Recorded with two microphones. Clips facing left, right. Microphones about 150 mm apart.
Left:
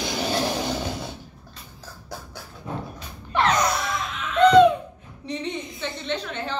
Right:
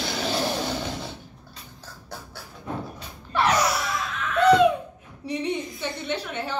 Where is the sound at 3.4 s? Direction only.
10° right (ahead or behind).